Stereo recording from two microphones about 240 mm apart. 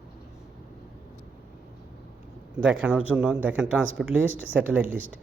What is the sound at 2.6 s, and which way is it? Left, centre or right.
Speech, centre.